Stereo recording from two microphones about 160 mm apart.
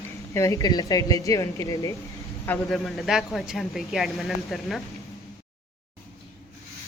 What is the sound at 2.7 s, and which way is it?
A man's voice, centre (ahead or behind).